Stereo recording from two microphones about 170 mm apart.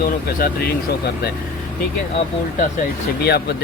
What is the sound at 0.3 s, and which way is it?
Speech, 60° left (ahead or behind).